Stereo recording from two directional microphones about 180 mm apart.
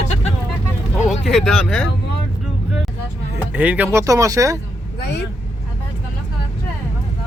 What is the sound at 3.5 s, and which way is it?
Speech, 10° right (ahead or behind).